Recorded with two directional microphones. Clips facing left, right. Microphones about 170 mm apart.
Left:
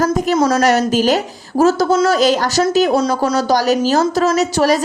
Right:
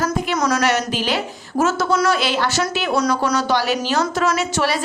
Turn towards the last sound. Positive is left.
turn(degrees=40)  # may be behind; listen again after turning